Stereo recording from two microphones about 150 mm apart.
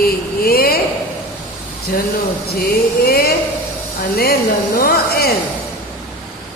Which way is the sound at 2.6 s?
90° left.